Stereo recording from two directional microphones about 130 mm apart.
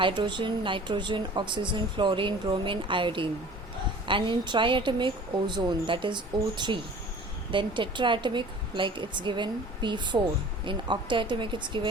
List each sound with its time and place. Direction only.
0.0 s speech: 35° right (ahead or behind)